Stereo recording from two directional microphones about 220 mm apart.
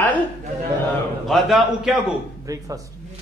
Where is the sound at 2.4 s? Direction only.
15° right (ahead or behind).